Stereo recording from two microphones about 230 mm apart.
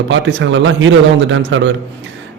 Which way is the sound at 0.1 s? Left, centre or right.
Right.